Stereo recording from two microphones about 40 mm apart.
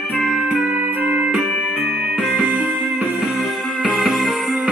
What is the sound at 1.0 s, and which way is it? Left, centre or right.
Music, right.